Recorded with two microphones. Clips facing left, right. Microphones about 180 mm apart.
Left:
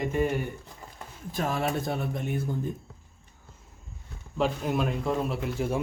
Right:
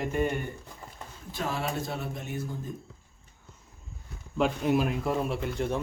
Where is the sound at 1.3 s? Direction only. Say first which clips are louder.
Left 3 dB; 50° left (ahead or behind).